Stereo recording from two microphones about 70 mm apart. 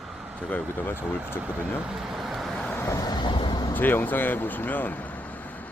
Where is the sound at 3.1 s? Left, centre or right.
Left.